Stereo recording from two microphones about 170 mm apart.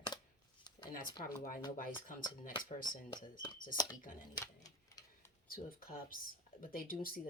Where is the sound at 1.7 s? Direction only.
55° left (ahead or behind).